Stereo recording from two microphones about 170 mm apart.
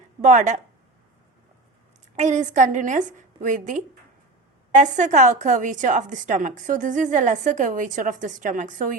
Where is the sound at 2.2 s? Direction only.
45° right (ahead or behind).